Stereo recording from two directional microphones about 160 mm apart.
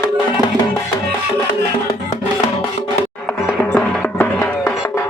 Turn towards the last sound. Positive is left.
turn(degrees=10)  # may be behind; listen again after turning